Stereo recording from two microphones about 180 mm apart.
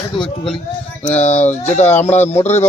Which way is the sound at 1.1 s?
40° left (ahead or behind).